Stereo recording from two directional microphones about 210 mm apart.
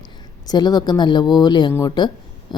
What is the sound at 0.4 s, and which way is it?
Speech, 20° left (ahead or behind).